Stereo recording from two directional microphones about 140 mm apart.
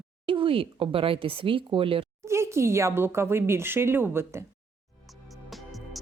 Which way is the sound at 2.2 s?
20° right (ahead or behind).